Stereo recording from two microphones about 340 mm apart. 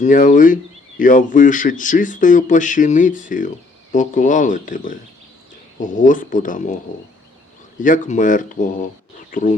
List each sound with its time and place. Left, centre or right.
0.0 s speech: left
7.8 s speech: left